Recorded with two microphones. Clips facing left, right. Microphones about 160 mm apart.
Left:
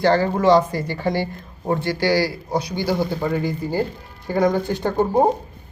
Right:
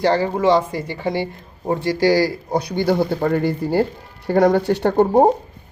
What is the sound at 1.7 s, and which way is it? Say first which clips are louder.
Speech: right 3 dB; 35° right (ahead or behind).